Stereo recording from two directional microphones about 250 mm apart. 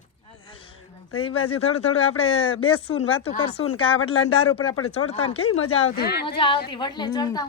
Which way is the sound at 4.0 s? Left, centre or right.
Left.